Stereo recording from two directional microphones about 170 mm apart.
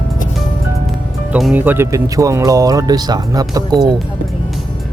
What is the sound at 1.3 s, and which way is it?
Speech, 10° right (ahead or behind).